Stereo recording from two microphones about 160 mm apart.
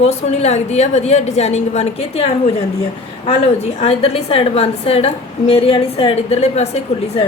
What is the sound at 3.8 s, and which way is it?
A woman's voice, 40° left (ahead or behind).